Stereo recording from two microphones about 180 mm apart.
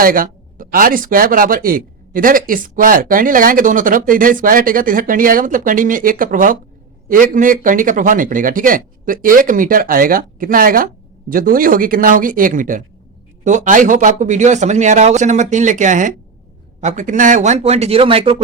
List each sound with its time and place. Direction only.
0.0 s speech: 50° right (ahead or behind); by 18.4 s 30° right (ahead or behind)